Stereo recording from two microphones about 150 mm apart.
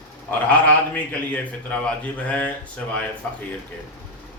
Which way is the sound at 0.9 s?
10° left (ahead or behind).